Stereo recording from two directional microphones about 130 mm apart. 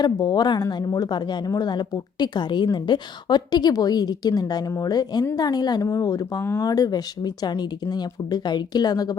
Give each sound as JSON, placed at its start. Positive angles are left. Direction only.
{"t": 0.0, "sound": "speech", "side_deg": 35}